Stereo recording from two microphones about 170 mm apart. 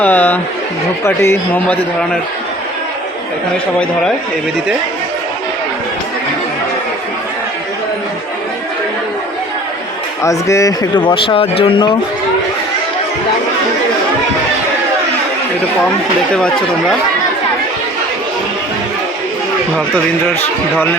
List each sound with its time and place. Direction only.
0.0 s a man's voice: 10° left (ahead or behind)
10.2 s speech: 20° left (ahead or behind)